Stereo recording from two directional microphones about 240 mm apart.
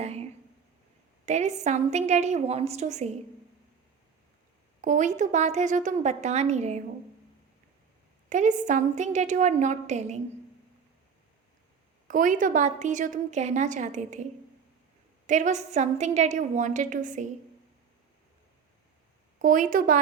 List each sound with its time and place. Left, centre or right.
0.0 s a sound: right
1.2 s a woman's voice: right
4.8 s a woman's voice: right
8.3 s a woman's voice: right
12.0 s a woman's voice: right
15.3 s a woman's voice: right
19.4 s a woman's voice: right